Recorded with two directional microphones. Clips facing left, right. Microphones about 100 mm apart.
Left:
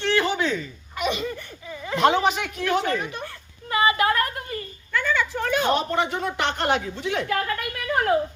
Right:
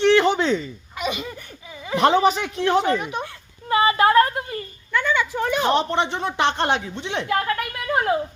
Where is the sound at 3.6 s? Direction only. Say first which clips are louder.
Right 4 dB; 30° right (ahead or behind).